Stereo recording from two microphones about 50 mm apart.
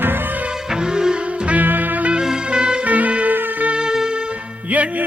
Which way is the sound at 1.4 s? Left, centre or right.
Right.